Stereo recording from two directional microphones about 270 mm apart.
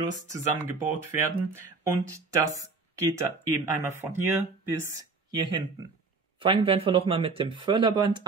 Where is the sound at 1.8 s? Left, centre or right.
Centre.